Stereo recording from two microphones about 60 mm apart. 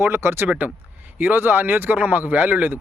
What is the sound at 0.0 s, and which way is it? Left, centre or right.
Speech, right.